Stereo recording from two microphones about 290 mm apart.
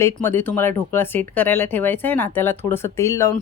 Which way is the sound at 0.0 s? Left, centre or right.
Centre.